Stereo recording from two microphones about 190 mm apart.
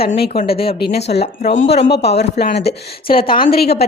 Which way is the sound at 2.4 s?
55° left (ahead or behind).